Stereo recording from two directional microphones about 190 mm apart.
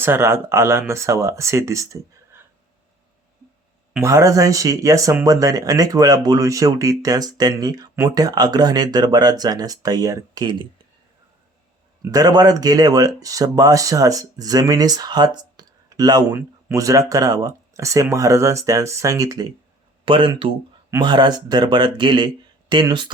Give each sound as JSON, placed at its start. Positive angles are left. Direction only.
{"t": 0.0, "sound": "speech", "side_deg": -10}
{"t": 4.0, "sound": "speech", "side_deg": -15}
{"t": 12.0, "sound": "speech", "side_deg": -20}